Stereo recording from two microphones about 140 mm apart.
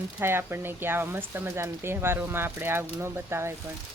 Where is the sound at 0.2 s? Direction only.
15° right (ahead or behind).